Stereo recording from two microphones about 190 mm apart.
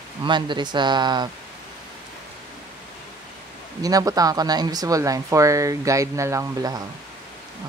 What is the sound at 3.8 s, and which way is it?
Speech, 20° right (ahead or behind).